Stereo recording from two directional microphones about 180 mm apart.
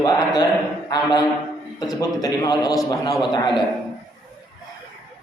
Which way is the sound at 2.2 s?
20° left (ahead or behind).